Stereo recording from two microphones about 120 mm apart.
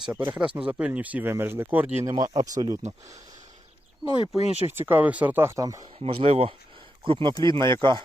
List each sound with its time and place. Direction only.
0.0 s speech: 15° right (ahead or behind)
2.0 s speech: 30° right (ahead or behind)
4.4 s speech: 60° left (ahead or behind)
4.6 s speech: 15° right (ahead or behind)
6.1 s speech: 50° right (ahead or behind)